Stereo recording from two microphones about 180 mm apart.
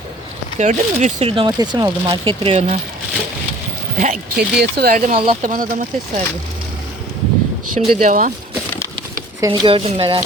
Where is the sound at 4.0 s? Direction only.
45° right (ahead or behind).